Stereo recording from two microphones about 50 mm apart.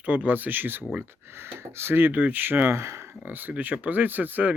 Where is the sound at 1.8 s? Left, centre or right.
Right.